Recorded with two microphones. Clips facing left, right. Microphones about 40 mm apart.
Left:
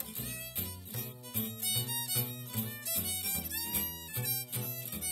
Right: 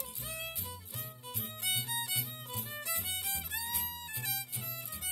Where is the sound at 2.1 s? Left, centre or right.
Left.